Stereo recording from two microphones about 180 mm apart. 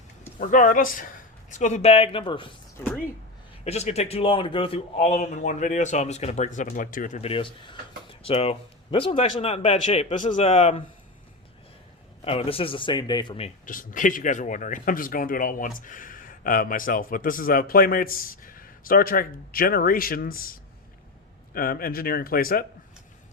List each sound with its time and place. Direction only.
0.3 s a man's voice: 45° left (ahead or behind); by 2.6 s 30° left (ahead or behind)
3.6 s a man's voice: 35° left (ahead or behind)
12.2 s a man's voice: 30° left (ahead or behind)
13.7 s speech: 50° left (ahead or behind)